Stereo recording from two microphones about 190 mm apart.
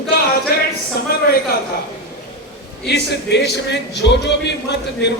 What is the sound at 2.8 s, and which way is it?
A man's voice, 60° left (ahead or behind).